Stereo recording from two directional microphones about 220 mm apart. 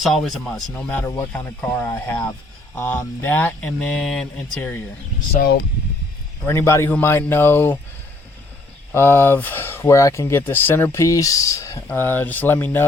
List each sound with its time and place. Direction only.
0.0 s speech: centre (ahead or behind)
5.4 s speech: 40° left (ahead or behind)
6.4 s speech: 10° left (ahead or behind)
8.9 s speech: 10° left (ahead or behind)